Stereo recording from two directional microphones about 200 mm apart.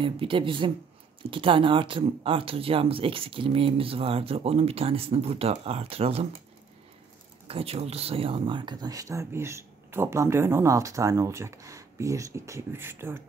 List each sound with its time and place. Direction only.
0.0 s speech: 25° right (ahead or behind)
7.4 s speech: 30° right (ahead or behind); by 13.2 s 10° right (ahead or behind)